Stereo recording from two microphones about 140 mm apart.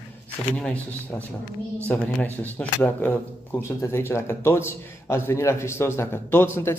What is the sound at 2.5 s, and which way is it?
Speech, 15° left (ahead or behind).